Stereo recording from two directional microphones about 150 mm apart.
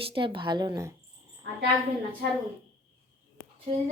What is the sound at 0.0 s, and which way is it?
Speech, 35° right (ahead or behind).